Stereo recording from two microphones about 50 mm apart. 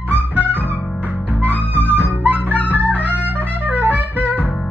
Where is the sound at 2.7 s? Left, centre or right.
Right.